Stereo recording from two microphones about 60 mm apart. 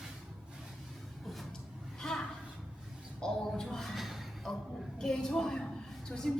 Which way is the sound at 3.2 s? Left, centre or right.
Centre.